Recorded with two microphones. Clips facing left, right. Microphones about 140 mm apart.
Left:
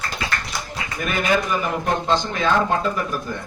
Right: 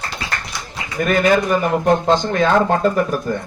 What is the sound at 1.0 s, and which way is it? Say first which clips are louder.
Speech: right 6 dB; 45° right (ahead or behind).